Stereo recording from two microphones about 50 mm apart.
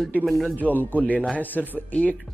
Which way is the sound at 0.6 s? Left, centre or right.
Left.